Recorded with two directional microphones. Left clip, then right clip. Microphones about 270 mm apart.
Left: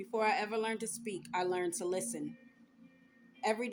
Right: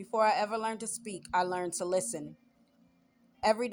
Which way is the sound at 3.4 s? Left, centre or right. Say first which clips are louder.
Right 6 dB; right.